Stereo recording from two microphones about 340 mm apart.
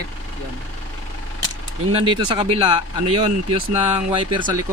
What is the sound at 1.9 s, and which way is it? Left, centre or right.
Speech, centre.